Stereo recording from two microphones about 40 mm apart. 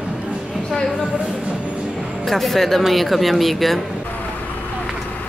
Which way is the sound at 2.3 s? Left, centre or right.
Centre.